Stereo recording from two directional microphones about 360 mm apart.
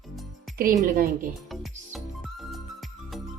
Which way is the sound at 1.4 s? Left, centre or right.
Centre.